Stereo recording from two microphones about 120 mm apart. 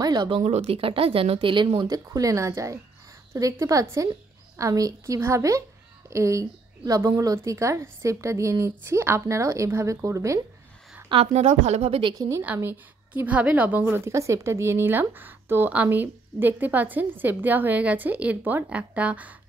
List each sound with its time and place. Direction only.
0.0 s a sound: 35° right (ahead or behind)
0.4 s speech: 70° right (ahead or behind)
0.7 s speech: 50° right (ahead or behind)
2.0 s a woman's voice: 25° right (ahead or behind)
11.3 s a woman's voice: 70° right (ahead or behind)
12.1 s a woman's voice: 25° right (ahead or behind)